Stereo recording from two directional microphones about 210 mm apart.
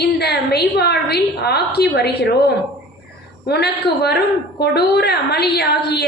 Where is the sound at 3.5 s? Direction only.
50° left (ahead or behind).